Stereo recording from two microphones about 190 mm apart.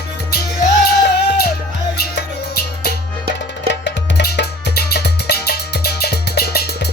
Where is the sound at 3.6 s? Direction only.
65° left (ahead or behind).